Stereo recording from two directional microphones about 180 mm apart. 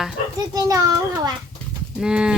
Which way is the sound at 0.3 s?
20° right (ahead or behind).